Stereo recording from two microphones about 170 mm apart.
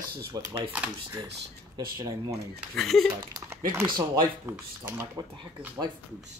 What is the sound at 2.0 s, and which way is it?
Speech, 20° right (ahead or behind).